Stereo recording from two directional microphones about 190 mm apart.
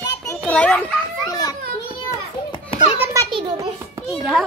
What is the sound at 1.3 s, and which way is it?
Children playing, 20° left (ahead or behind).